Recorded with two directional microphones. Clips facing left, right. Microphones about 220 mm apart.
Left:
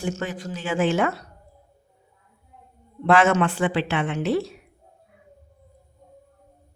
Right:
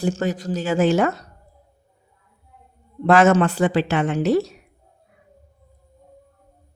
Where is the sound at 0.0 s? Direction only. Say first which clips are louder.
Right 6 dB; 35° right (ahead or behind).